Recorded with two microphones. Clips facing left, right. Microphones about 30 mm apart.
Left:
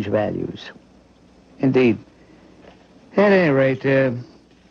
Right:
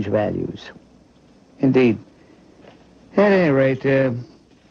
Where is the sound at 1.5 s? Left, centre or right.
Centre.